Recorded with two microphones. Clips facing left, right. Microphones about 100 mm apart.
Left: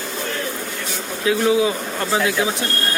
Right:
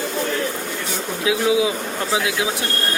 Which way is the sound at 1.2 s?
10° right (ahead or behind).